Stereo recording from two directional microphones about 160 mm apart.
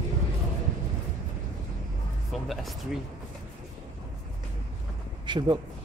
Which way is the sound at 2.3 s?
Centre (ahead or behind).